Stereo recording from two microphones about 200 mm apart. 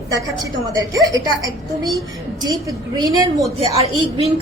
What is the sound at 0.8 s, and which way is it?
A woman's voice, 15° right (ahead or behind).